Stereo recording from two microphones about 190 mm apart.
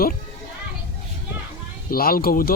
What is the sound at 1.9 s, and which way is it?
Speech, 50° left (ahead or behind).